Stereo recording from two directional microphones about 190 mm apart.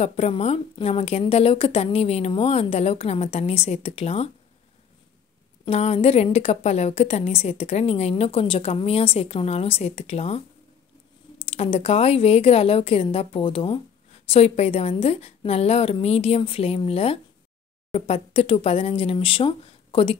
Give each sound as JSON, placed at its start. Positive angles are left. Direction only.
{"t": 0.0, "sound": "a woman's voice", "side_deg": 35}
{"t": 5.7, "sound": "a woman's voice", "side_deg": 35}
{"t": 11.4, "sound": "a woman's voice", "side_deg": 30}